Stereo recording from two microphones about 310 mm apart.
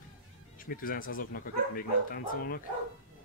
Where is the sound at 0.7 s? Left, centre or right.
Left.